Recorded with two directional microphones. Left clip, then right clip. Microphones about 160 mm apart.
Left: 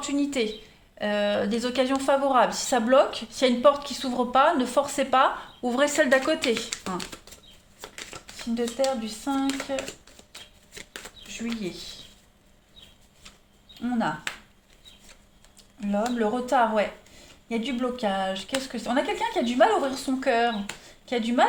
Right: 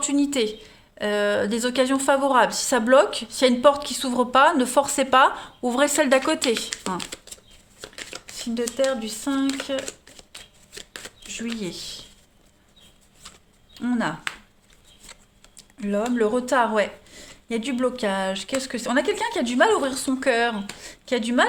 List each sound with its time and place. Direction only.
0.0 s a woman's voice: 55° right (ahead or behind)
5.6 s speech: 35° right (ahead or behind)
9.0 s speech: 55° right (ahead or behind)
11.3 s speech: 50° right (ahead or behind)
13.7 s speech: 65° right (ahead or behind)
15.5 s a sound: 65° right (ahead or behind)
16.1 s speech: 70° right (ahead or behind)
20.8 s a sound: 65° right (ahead or behind)